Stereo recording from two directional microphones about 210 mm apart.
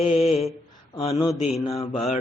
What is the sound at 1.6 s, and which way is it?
Mantra, 15° left (ahead or behind).